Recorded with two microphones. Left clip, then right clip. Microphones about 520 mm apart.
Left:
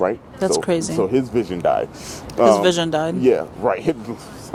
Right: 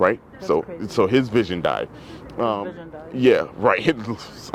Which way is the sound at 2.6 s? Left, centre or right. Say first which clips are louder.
Left 17 dB; left.